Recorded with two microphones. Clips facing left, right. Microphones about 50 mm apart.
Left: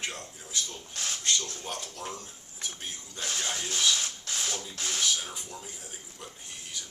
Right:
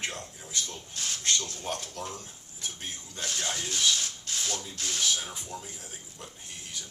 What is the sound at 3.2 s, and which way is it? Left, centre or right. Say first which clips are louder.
Speech: even; centre.